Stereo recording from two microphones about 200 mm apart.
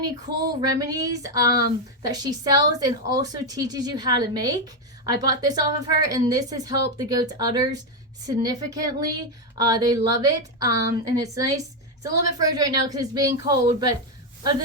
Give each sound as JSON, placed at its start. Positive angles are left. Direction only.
{"t": 0.0, "sound": "a woman's voice", "side_deg": -15}